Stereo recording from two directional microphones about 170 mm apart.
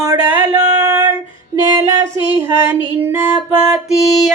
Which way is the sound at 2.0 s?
15° right (ahead or behind).